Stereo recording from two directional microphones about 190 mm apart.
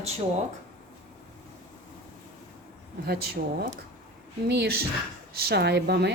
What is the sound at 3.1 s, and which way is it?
Speech, 55° right (ahead or behind).